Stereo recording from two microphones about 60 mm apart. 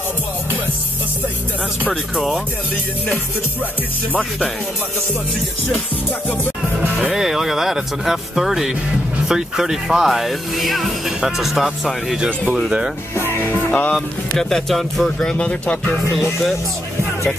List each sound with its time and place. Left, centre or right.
2.1 s speech: centre
6.8 s music: right
7.1 s speech: centre
12.6 s speech: centre
13.1 s music: left
13.9 s speech: centre
15.3 s speech: left
16.1 s music: left